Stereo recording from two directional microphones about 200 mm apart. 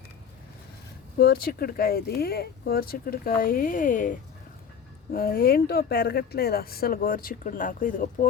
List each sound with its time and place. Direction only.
1.2 s speech: 50° left (ahead or behind)
5.1 s speech: 50° left (ahead or behind)